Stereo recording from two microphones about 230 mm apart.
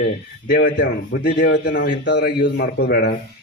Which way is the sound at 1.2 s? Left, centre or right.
Left.